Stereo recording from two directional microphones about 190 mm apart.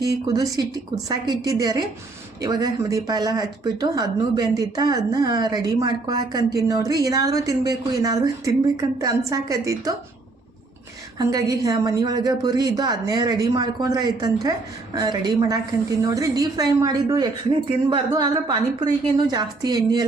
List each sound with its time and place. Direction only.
0.3 s a woman's voice: 20° right (ahead or behind)
11.2 s speech: 20° right (ahead or behind)